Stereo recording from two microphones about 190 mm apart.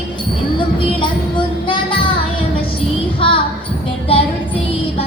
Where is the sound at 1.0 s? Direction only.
25° left (ahead or behind).